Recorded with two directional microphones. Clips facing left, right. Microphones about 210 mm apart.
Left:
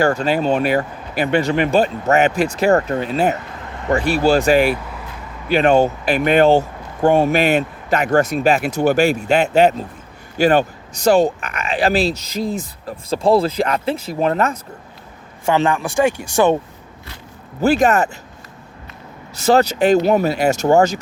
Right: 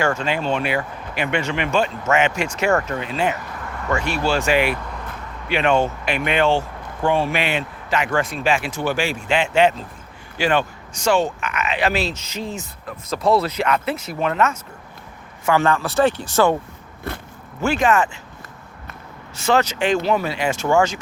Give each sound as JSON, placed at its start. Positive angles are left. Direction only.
{"t": 0.0, "sound": "speech", "side_deg": 35}
{"t": 3.6, "sound": "a sound", "side_deg": 20}
{"t": 3.9, "sound": "speech", "side_deg": 35}
{"t": 4.7, "sound": "vehicle", "side_deg": 5}
{"t": 5.5, "sound": "speech", "side_deg": 35}
{"t": 15.4, "sound": "speech", "side_deg": 20}
{"t": 17.1, "sound": "speech", "side_deg": -55}
{"t": 17.6, "sound": "speech", "side_deg": 40}
{"t": 19.4, "sound": "speech", "side_deg": 35}